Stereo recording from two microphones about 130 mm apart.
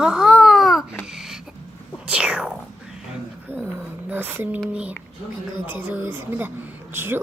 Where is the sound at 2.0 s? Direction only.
10° right (ahead or behind).